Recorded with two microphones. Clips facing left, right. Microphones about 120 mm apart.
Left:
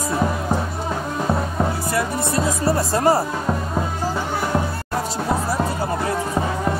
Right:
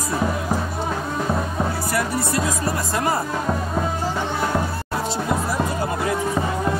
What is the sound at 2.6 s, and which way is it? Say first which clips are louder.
Speech: left 5 dB; 30° left (ahead or behind).